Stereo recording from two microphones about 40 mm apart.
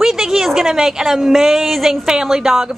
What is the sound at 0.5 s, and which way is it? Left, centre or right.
A woman's voice, centre.